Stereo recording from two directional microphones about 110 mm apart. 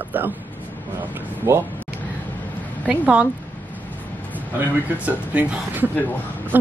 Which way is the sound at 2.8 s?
10° right (ahead or behind).